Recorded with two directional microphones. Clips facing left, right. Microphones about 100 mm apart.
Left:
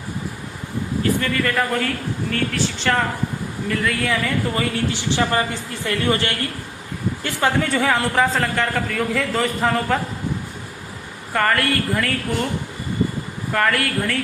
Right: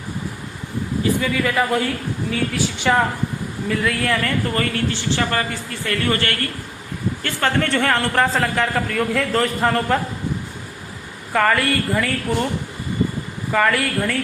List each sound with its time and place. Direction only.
1.2 s a man's voice: 5° right (ahead or behind)
4.5 s a man's voice: 15° left (ahead or behind); by 10.0 s centre (ahead or behind)
11.3 s a man's voice: centre (ahead or behind)
13.5 s a man's voice: centre (ahead or behind)